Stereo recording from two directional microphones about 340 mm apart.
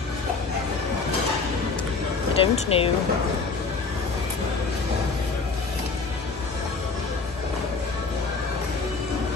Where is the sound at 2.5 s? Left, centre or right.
Centre.